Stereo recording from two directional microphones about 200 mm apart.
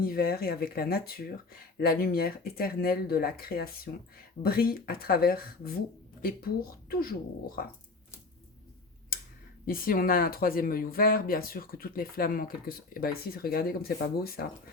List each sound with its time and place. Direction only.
0.0 s speech: 50° left (ahead or behind)
9.6 s speech: 45° left (ahead or behind)